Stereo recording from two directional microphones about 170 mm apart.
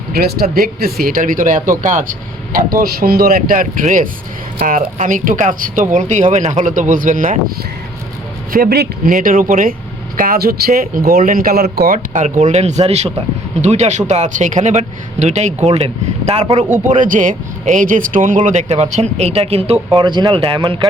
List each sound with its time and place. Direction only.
0.1 s speech: 65° right (ahead or behind)
8.5 s speech: 65° right (ahead or behind)
9.1 s speech: 55° right (ahead or behind); by 20.6 s 30° right (ahead or behind)